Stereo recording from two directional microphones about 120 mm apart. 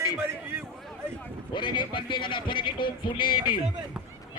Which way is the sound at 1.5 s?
40° left (ahead or behind).